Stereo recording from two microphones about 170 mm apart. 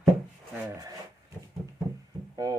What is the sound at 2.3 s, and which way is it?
Speech, 20° right (ahead or behind).